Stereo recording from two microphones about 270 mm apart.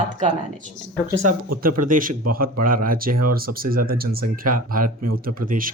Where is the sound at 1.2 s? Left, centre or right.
Right.